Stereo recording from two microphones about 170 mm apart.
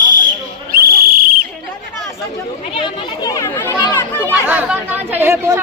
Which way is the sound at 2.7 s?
25° left (ahead or behind).